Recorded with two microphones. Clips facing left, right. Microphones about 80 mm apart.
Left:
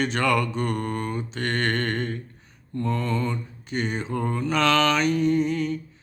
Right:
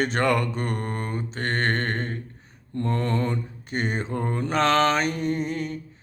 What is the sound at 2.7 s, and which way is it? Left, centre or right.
Mantra, right.